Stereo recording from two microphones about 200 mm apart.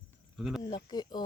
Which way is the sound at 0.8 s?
20° left (ahead or behind).